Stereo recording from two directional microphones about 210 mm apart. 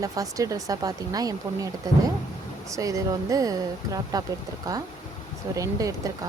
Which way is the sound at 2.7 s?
15° right (ahead or behind).